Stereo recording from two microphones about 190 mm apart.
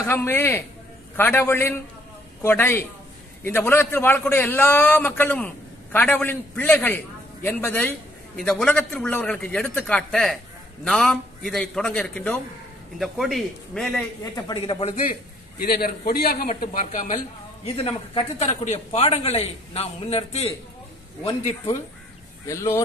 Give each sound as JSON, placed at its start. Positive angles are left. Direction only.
{"t": 0.0, "sound": "a man's voice", "side_deg": 10}
{"t": 14.3, "sound": "a man's voice", "side_deg": 25}
{"t": 15.6, "sound": "a man's voice", "side_deg": 50}
{"t": 17.7, "sound": "a man's voice", "side_deg": 30}
{"t": 22.5, "sound": "a man's voice", "side_deg": 15}